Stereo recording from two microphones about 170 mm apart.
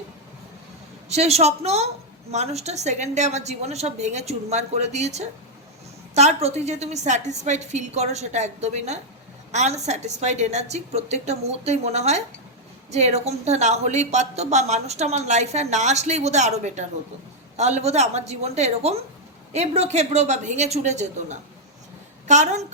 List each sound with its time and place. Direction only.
1.0 s a woman's voice: 40° right (ahead or behind)